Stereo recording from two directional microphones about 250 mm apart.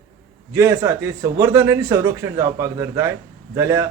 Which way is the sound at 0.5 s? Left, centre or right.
Centre.